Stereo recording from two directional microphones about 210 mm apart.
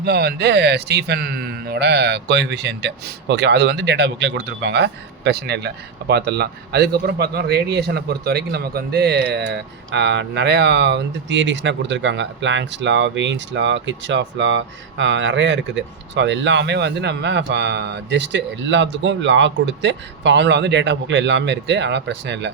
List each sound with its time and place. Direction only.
0.0 s a man's voice: 50° right (ahead or behind)